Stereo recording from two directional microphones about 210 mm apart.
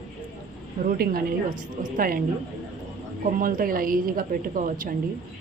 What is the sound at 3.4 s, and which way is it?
A woman's voice, 40° right (ahead or behind).